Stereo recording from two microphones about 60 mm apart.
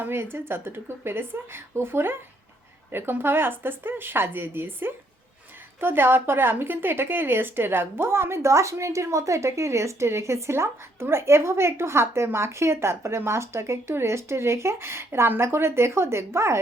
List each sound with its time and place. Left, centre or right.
0.0 s a woman's voice: right